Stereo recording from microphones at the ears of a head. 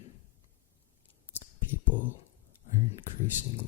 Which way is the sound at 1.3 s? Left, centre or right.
Left.